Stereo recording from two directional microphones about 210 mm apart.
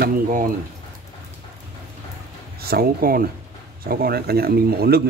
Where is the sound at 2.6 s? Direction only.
45° right (ahead or behind).